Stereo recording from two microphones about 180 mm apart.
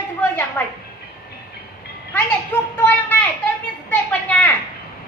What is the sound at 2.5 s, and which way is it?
A woman's voice, 10° left (ahead or behind).